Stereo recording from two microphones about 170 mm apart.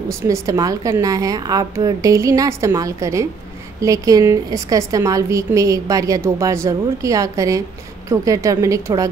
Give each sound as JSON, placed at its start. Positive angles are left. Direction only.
{"t": 0.1, "sound": "a woman's voice", "side_deg": -20}